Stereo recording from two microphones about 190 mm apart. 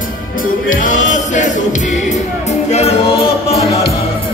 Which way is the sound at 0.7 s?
45° left (ahead or behind).